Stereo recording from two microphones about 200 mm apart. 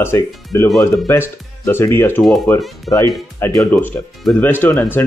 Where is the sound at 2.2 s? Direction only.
Centre (ahead or behind).